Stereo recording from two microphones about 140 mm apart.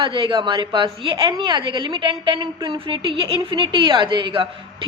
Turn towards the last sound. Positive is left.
turn(degrees=-35)  # may be behind; listen again after turning